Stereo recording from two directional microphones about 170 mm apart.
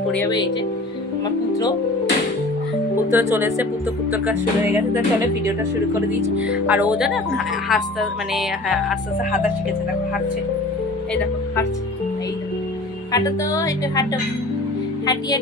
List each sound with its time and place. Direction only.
3.1 s speech: 10° right (ahead or behind)
13.1 s speech: 20° left (ahead or behind)